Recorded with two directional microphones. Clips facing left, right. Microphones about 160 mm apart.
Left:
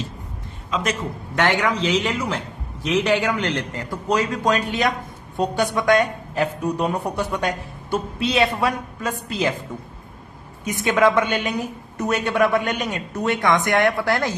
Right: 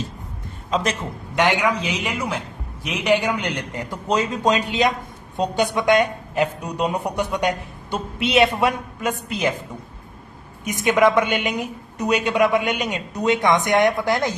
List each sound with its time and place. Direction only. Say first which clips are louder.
1.4 s a woman's voice: right 1 dB; 15° right (ahead or behind)
10.6 s a woman's voice: right 1 dB; 15° right (ahead or behind)